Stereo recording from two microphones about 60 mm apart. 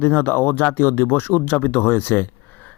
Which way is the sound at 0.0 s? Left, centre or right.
Left.